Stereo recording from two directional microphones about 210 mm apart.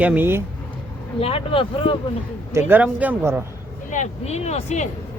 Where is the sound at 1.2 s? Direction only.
25° left (ahead or behind).